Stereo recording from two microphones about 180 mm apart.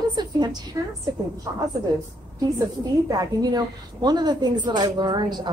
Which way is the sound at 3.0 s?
20° right (ahead or behind).